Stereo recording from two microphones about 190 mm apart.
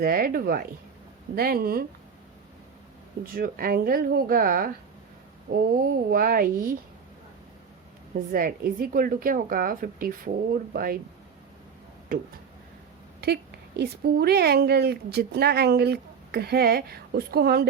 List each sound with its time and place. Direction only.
0.0 s a woman's voice: 50° right (ahead or behind)
3.3 s a woman's voice: 50° right (ahead or behind)
8.3 s a woman's voice: 50° right (ahead or behind)
13.2 s speech: 60° right (ahead or behind)